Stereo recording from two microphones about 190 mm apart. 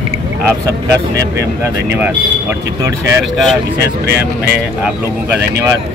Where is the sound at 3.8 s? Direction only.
60° right (ahead or behind).